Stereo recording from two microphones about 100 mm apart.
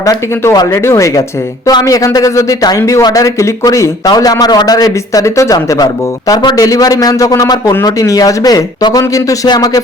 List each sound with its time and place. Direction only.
0.5 s a man's voice: 40° left (ahead or behind)